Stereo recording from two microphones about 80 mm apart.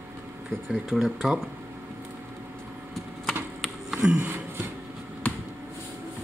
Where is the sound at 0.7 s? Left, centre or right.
Centre.